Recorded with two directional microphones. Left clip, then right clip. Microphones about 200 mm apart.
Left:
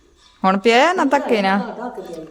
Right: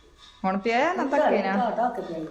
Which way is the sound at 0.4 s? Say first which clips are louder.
Left 10 dB; 50° left (ahead or behind).